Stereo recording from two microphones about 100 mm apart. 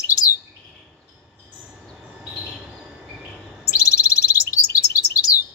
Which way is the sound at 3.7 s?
35° left (ahead or behind).